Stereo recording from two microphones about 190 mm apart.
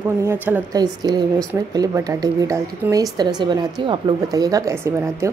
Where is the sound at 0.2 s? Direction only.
10° right (ahead or behind).